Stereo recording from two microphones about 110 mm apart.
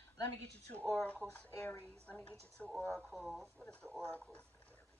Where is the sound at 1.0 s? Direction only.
10° left (ahead or behind).